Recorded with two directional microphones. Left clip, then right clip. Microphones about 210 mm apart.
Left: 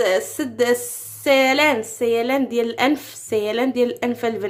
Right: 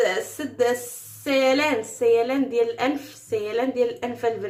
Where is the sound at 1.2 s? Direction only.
40° left (ahead or behind).